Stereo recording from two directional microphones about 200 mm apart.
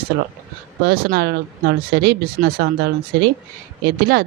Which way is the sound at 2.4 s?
40° right (ahead or behind).